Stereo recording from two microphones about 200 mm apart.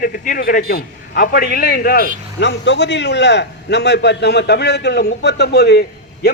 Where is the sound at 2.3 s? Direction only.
60° left (ahead or behind).